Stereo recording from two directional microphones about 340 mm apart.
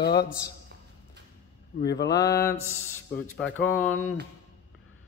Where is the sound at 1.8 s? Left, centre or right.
Left.